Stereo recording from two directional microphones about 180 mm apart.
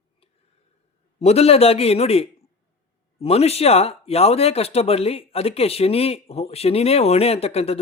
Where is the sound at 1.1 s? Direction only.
35° left (ahead or behind).